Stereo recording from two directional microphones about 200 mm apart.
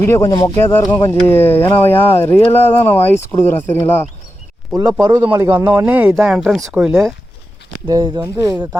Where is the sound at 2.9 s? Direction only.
10° left (ahead or behind).